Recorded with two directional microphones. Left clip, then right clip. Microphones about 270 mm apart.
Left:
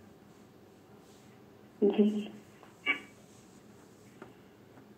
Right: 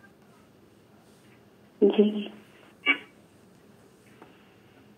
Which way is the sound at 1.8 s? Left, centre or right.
Right.